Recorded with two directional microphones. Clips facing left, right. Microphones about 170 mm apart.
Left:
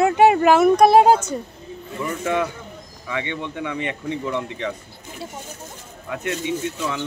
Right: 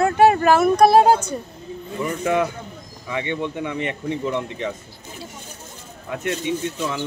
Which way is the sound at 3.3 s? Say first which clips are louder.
Right 2 dB; 25° right (ahead or behind).